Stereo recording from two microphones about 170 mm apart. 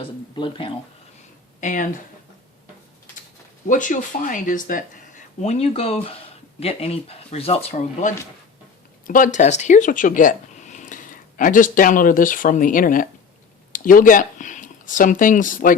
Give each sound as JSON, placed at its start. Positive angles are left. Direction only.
{"t": 0.0, "sound": "speech", "side_deg": 30}
{"t": 1.6, "sound": "speech", "side_deg": 50}
{"t": 3.7, "sound": "speech", "side_deg": 50}
{"t": 9.0, "sound": "speech", "side_deg": 50}